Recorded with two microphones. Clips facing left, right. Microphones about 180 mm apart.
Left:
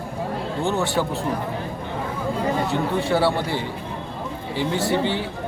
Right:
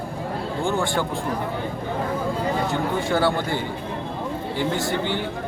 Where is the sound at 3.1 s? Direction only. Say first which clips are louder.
Even; centre (ahead or behind).